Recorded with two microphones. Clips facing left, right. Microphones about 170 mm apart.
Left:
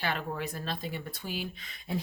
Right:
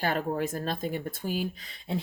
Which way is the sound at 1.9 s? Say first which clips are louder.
Right 2 dB; 25° right (ahead or behind).